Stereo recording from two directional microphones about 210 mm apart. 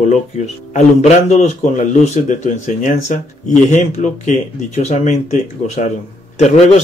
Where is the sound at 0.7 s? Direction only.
30° left (ahead or behind).